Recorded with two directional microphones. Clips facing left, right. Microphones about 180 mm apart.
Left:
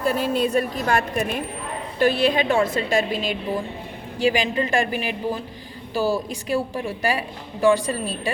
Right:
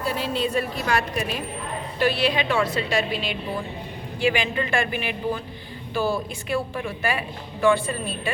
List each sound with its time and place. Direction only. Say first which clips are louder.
0.0 s a woman's voice: left 4 dB; 50° left (ahead or behind)